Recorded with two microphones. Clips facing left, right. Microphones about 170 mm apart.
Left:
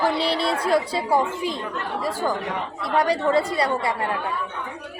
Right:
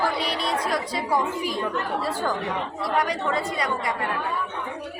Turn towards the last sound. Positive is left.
turn(degrees=30)  # may be behind; listen again after turning